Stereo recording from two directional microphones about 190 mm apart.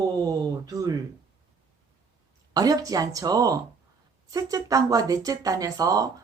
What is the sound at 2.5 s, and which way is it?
Speech, 20° right (ahead or behind).